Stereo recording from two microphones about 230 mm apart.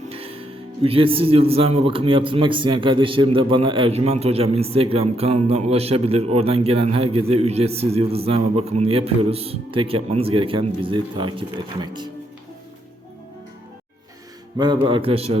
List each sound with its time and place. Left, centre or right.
0.1 s speech: right
14.6 s speech: right